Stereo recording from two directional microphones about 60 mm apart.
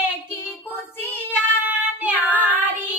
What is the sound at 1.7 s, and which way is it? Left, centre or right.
Child singing, right.